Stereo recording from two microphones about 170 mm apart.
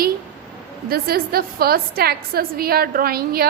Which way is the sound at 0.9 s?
65° right (ahead or behind).